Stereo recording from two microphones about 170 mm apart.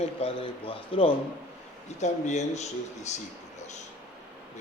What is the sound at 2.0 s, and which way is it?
Speech, 45° left (ahead or behind).